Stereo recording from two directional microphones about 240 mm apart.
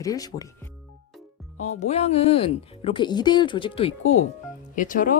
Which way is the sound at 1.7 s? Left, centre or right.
Left.